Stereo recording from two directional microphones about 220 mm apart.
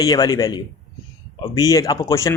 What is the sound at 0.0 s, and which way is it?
A man's voice, 15° left (ahead or behind).